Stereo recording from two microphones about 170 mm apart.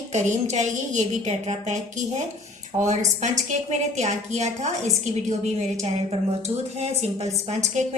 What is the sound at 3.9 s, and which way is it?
A woman's voice, 45° right (ahead or behind).